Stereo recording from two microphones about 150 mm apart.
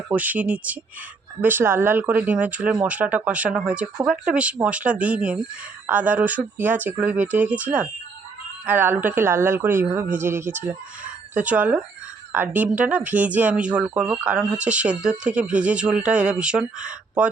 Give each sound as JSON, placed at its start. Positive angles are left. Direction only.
{"t": 0.1, "sound": "speech", "side_deg": -10}